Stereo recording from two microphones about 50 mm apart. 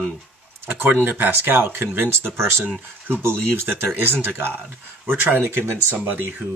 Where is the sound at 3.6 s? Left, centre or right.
Right.